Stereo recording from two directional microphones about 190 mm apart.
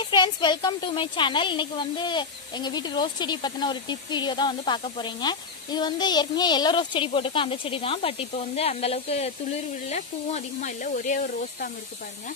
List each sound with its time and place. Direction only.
0.1 s speech: 25° left (ahead or behind); by 11.1 s 40° left (ahead or behind)